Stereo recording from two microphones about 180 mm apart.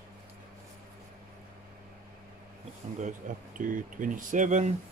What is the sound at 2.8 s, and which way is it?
Bee, 40° right (ahead or behind).